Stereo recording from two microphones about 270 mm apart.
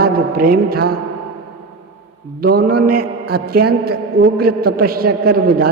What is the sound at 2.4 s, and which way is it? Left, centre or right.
A man's voice, right.